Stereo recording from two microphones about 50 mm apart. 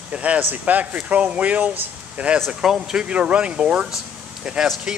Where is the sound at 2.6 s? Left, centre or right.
Centre.